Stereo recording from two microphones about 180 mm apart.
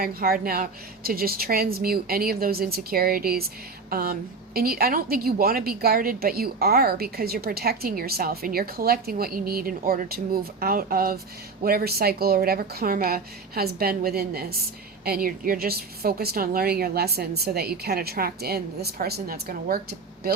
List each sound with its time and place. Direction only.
0.0 s a woman's voice: 55° right (ahead or behind)